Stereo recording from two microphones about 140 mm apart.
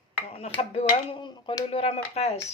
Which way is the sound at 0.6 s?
45° left (ahead or behind).